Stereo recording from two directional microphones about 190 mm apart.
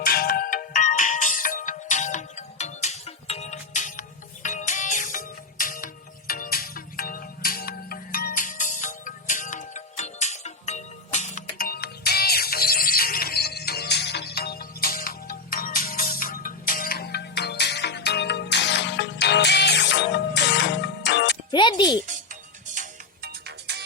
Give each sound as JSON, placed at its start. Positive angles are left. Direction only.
{"t": 0.0, "sound": "ringtone", "side_deg": 50}
{"t": 4.4, "sound": "music", "side_deg": 40}
{"t": 21.5, "sound": "music", "side_deg": 25}
{"t": 22.7, "sound": "music", "side_deg": -45}
{"t": 23.5, "sound": "music", "side_deg": -60}